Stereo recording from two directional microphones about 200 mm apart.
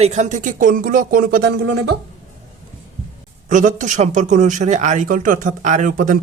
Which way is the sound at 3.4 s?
40° right (ahead or behind).